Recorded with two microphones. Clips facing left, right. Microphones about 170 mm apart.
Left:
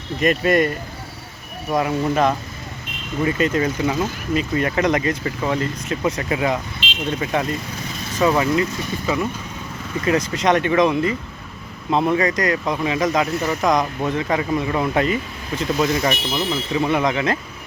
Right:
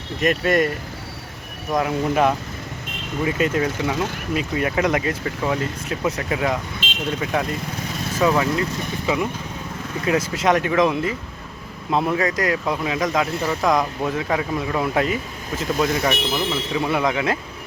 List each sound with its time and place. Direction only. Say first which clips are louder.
0.2 s speech: left 2 dB; centre (ahead or behind)
1.7 s speech: left 1 dB; centre (ahead or behind)
6.8 s vehicle: even; 45° right (ahead or behind)
7.3 s speech: left 1 dB; centre (ahead or behind)
10.0 s speech: left 1 dB; 5° right (ahead or behind)